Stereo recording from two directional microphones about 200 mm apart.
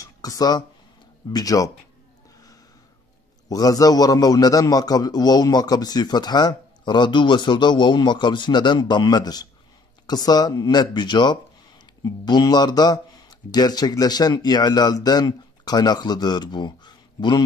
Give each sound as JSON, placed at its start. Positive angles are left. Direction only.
{"t": 0.0, "sound": "speech", "side_deg": 15}
{"t": 3.4, "sound": "a man's voice", "side_deg": 20}